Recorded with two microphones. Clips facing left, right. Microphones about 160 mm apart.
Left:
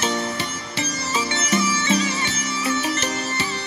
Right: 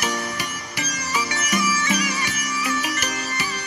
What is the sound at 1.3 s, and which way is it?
Music, 25° left (ahead or behind).